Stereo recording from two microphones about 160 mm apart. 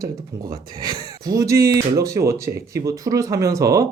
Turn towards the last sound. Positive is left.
turn(degrees=-20)  # may be behind; listen again after turning